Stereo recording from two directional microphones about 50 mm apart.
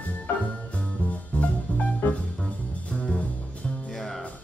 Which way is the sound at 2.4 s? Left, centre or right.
Centre.